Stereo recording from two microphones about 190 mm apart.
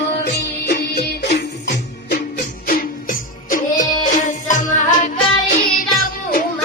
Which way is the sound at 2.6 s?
45° left (ahead or behind).